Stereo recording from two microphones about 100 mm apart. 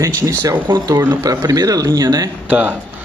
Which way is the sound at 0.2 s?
30° right (ahead or behind).